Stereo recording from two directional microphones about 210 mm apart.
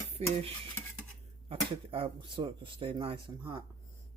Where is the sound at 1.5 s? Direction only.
25° right (ahead or behind).